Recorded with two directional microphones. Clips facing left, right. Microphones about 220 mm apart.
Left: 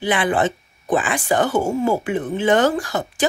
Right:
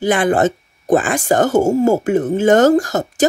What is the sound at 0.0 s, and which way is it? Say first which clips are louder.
Speech: right 5 dB; 45° right (ahead or behind).